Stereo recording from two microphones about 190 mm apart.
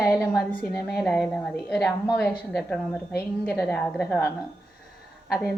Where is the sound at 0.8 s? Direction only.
Centre (ahead or behind).